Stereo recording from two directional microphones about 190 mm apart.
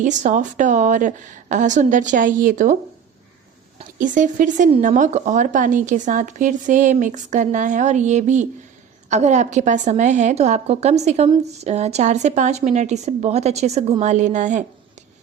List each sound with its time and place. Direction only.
0.0 s a woman's voice: 40° right (ahead or behind)
3.8 s a woman's voice: 40° right (ahead or behind)